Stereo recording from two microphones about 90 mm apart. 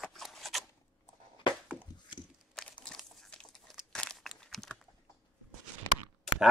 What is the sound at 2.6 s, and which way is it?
Crumpling, 10° left (ahead or behind).